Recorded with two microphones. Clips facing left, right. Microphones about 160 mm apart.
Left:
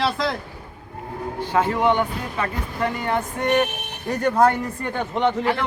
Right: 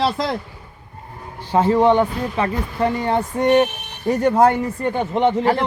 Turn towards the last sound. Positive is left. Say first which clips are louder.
# right 4 dB
turn(degrees=-35)  # may be behind; listen again after turning